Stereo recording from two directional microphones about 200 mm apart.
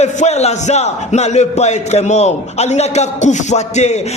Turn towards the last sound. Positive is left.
turn(degrees=35)  # may be behind; listen again after turning